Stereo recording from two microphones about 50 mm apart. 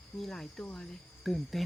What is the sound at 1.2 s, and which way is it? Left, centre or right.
Speech, centre.